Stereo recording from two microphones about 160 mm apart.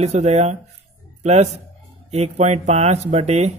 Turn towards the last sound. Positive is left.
turn(degrees=-40)  # may be behind; listen again after turning